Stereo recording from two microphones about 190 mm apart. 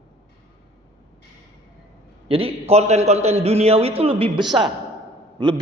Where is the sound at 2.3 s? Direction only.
30° right (ahead or behind).